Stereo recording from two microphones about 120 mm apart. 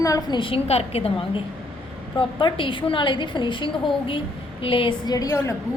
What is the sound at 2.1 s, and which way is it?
A woman's voice, 45° left (ahead or behind).